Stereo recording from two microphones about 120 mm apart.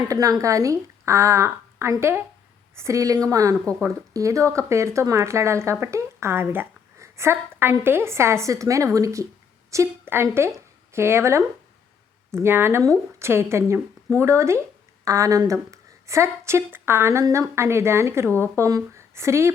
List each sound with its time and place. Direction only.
0.1 s a woman's voice: 30° right (ahead or behind)